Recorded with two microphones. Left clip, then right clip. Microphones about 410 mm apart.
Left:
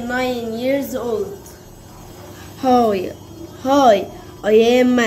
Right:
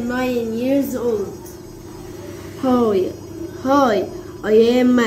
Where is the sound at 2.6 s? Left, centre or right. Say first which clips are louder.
Left 2 dB; left.